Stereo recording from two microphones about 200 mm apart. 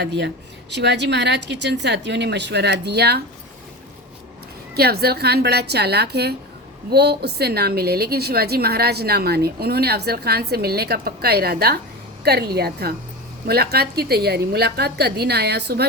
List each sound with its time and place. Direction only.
0.0 s a woman's voice: 60° right (ahead or behind)
4.7 s a woman's voice: 50° right (ahead or behind)